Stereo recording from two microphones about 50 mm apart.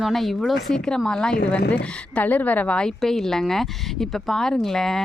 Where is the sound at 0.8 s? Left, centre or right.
Centre.